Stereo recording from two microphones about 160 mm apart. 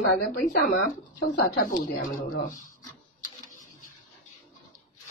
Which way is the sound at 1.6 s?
60° left (ahead or behind).